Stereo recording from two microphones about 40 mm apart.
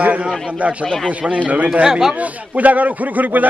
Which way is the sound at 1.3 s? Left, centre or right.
Right.